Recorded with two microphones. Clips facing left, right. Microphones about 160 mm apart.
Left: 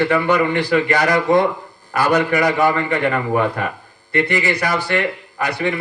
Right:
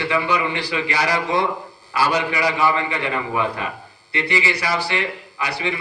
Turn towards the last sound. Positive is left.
turn(degrees=50)  # may be behind; listen again after turning